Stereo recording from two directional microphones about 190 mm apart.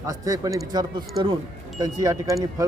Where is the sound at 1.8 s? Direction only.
20° right (ahead or behind).